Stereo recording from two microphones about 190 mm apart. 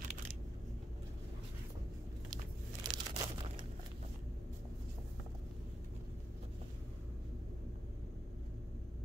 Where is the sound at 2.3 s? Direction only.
20° right (ahead or behind).